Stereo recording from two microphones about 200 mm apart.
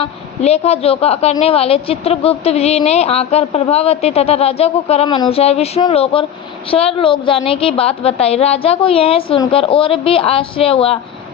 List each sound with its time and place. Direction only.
0.0 s a woman's voice: 30° left (ahead or behind)